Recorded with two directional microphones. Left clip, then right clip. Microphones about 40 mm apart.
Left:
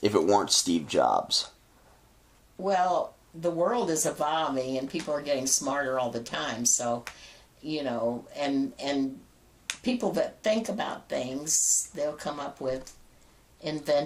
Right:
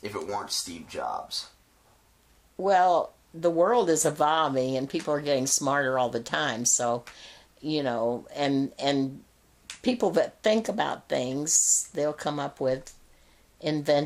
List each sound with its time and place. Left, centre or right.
0.0 s speech: left
2.6 s speech: right